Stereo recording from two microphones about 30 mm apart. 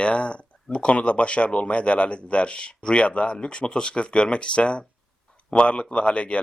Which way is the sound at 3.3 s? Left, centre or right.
Left.